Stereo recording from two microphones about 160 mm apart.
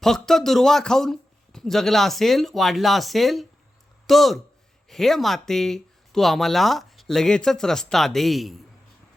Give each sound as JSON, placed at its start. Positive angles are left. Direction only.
{"t": 0.0, "sound": "speech", "side_deg": 0}